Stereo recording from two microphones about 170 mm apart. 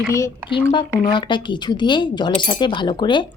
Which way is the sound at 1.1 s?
30° left (ahead or behind).